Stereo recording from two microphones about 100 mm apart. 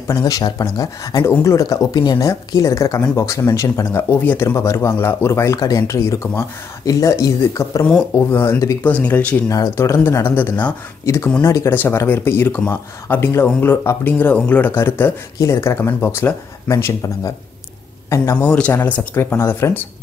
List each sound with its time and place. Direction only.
0.1 s speech: 40° left (ahead or behind)
8.2 s speech: 20° left (ahead or behind)
9.5 s speech: 35° left (ahead or behind)
11.7 s speech: 25° left (ahead or behind)
16.7 s speech: 35° left (ahead or behind)
18.4 s speech: 15° left (ahead or behind)